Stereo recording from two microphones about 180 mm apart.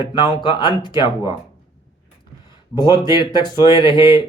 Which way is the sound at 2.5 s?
20° left (ahead or behind).